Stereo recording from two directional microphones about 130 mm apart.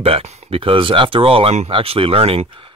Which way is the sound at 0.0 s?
50° right (ahead or behind).